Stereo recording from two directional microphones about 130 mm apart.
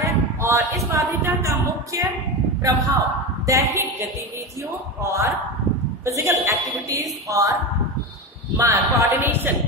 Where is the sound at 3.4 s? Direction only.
25° right (ahead or behind).